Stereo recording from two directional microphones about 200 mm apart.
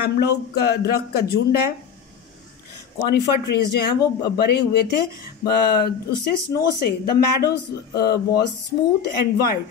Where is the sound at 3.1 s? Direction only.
50° left (ahead or behind).